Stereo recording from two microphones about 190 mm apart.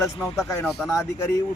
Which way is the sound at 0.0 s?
15° left (ahead or behind).